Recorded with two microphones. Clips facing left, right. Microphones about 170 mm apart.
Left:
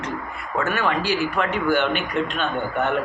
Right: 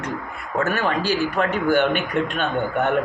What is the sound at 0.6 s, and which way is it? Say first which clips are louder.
A man's voice: right 1 dB; 40° right (ahead or behind).